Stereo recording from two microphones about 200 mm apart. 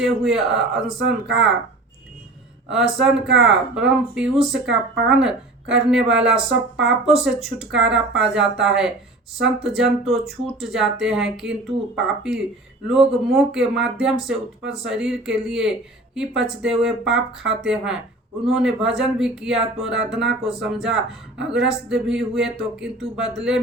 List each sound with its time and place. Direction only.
0.0 s speech: centre (ahead or behind)
3.0 s speech: centre (ahead or behind)
6.5 s speech: 70° right (ahead or behind)
7.0 s speech: centre (ahead or behind)
12.9 s speech: centre (ahead or behind)